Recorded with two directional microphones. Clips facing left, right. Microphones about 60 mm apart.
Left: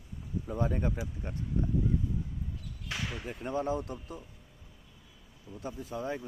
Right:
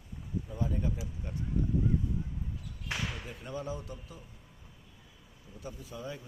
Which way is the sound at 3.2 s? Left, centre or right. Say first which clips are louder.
Left 6 dB; left.